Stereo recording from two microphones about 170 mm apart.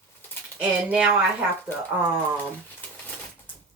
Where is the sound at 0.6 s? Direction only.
5° right (ahead or behind).